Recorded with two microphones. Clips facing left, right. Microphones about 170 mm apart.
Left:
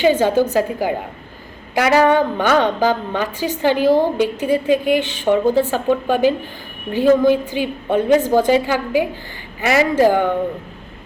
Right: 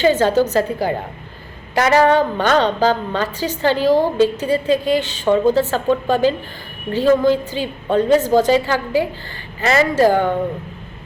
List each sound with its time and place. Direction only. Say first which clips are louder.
0.0 s a woman's voice: even; 15° left (ahead or behind)